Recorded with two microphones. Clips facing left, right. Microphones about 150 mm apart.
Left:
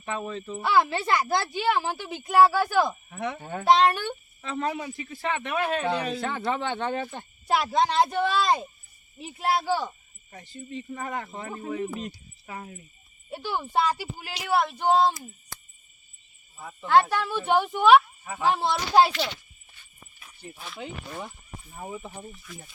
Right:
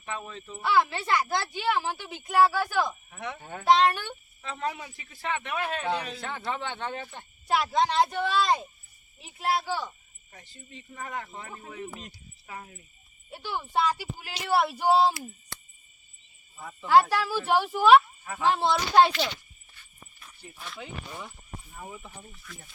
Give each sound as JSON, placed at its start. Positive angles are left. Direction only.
{"t": 0.0, "sound": "speech", "side_deg": 50}
{"t": 0.6, "sound": "a woman's voice", "side_deg": 35}
{"t": 3.2, "sound": "speech", "side_deg": 50}
{"t": 3.8, "sound": "a woman's voice", "side_deg": 40}
{"t": 4.4, "sound": "a man's voice", "side_deg": 65}
{"t": 7.4, "sound": "a woman's voice", "side_deg": 35}
{"t": 10.9, "sound": "speech", "side_deg": 55}
{"t": 13.3, "sound": "speech", "side_deg": 45}
{"t": 14.4, "sound": "speech", "side_deg": -5}
{"t": 16.8, "sound": "speech", "side_deg": -5}
{"t": 21.8, "sound": "speech", "side_deg": 25}
{"t": 22.3, "sound": "speech", "side_deg": 10}